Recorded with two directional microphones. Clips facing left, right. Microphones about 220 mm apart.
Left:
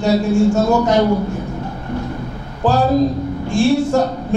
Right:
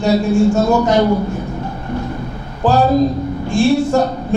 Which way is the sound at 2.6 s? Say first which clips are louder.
Right 1 dB; 15° right (ahead or behind).